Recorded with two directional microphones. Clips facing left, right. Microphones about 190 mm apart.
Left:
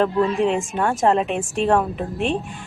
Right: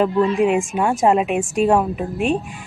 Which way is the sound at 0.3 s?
10° right (ahead or behind).